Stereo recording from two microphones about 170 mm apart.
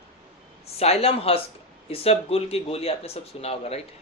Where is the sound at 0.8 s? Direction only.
35° left (ahead or behind).